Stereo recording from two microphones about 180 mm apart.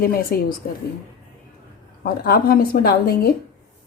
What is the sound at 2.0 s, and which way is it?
Speech, 55° left (ahead or behind).